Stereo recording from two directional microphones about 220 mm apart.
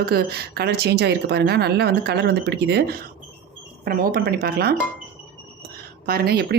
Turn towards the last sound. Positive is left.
turn(degrees=-45)  # may be behind; listen again after turning